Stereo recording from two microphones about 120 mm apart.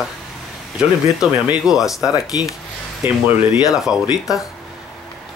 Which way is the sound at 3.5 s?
5° right (ahead or behind).